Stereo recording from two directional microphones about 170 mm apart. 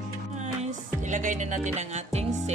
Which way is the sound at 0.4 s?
45° right (ahead or behind).